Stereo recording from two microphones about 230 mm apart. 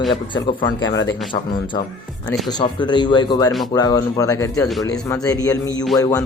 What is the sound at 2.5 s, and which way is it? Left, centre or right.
Speech, centre.